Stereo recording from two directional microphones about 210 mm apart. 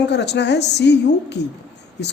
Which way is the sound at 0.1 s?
55° left (ahead or behind).